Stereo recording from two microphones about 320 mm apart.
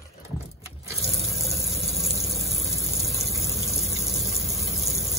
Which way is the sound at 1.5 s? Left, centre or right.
Centre.